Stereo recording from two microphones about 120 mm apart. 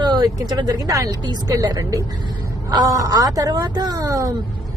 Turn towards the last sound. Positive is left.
turn(degrees=-30)  # may be behind; listen again after turning